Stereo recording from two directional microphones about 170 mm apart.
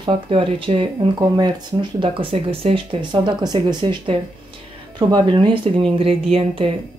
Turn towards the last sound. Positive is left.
turn(degrees=-35)  # may be behind; listen again after turning